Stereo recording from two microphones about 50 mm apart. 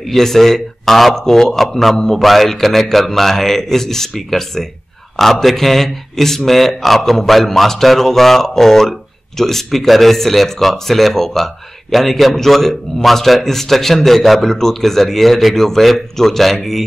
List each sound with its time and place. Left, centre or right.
0.1 s speech: centre